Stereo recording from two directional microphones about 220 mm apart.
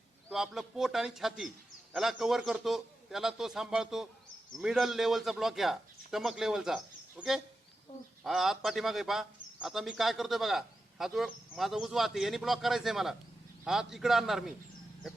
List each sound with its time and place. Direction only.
0.3 s a man's voice: centre (ahead or behind)